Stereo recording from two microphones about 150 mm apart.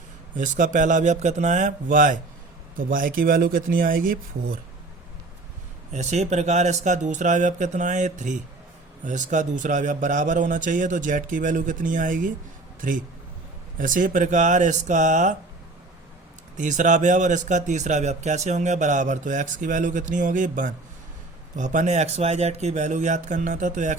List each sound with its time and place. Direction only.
0.3 s speech: 60° right (ahead or behind)
5.9 s speech: 50° right (ahead or behind)
16.6 s speech: 55° right (ahead or behind)